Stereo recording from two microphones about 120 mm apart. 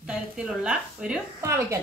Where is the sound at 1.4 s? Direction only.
25° right (ahead or behind).